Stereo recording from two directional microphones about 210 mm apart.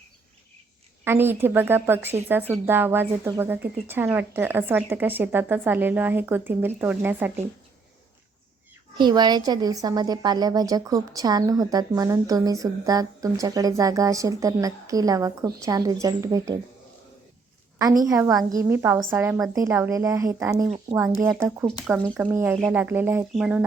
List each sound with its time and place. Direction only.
1.0 s a woman's voice: 10° right (ahead or behind)
9.0 s a woman's voice: 20° right (ahead or behind)
17.7 s a woman's voice: 15° right (ahead or behind)